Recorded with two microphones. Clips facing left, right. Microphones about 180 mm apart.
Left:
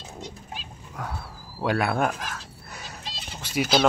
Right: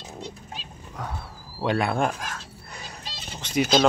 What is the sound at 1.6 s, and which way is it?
Speech, 5° left (ahead or behind).